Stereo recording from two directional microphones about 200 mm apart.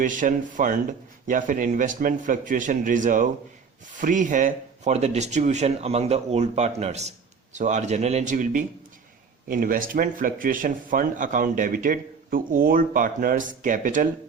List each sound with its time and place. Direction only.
0.0 s speech: 40° right (ahead or behind)